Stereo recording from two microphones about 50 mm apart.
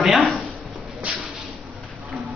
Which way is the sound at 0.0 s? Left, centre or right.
Centre.